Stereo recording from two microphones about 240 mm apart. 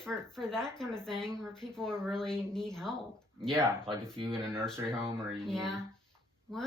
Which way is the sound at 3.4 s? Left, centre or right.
Centre.